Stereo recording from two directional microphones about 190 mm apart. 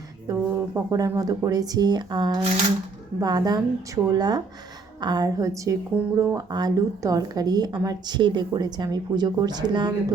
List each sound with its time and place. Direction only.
0.3 s a woman's voice: 20° right (ahead or behind)